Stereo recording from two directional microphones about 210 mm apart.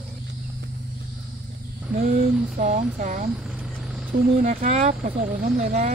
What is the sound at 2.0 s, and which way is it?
Speech, 35° right (ahead or behind).